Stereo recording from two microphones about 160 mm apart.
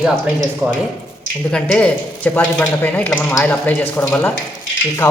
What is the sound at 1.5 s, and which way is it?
Speech, 5° left (ahead or behind).